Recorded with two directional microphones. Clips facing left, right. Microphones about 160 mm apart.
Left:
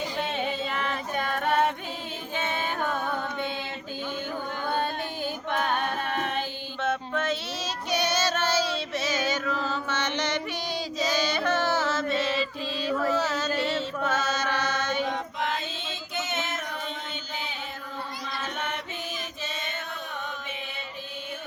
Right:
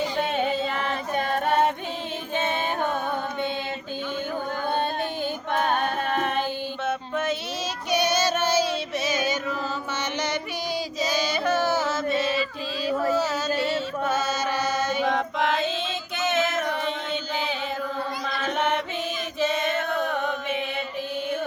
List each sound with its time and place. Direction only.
0.2 s music: 45° right (ahead or behind)
2.3 s music: 25° right (ahead or behind)
5.5 s singing: 40° right (ahead or behind)
6.8 s a sound: 10° right (ahead or behind)
7.9 s female singing: 15° right (ahead or behind)
11.0 s chant: 10° right (ahead or behind)
13.1 s a sound: 10° right (ahead or behind)
13.6 s chant: 10° right (ahead or behind)
15.0 s a sound: 90° right
16.1 s child singing: 90° right
18.3 s mantra: 90° right
19.4 s music: 75° right (ahead or behind)